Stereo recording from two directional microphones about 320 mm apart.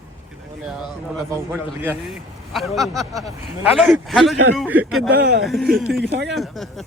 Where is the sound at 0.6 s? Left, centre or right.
Centre.